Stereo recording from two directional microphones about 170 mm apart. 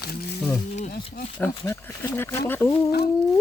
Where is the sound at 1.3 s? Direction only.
15° left (ahead or behind).